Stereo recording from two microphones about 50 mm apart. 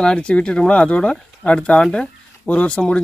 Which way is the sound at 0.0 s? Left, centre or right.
Centre.